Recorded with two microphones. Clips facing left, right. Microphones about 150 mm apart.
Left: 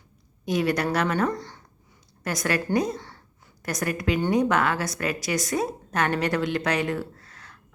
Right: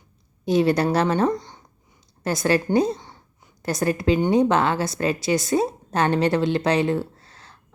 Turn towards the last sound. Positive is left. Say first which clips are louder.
# right 3 dB
turn(degrees=-30)  # may be behind; listen again after turning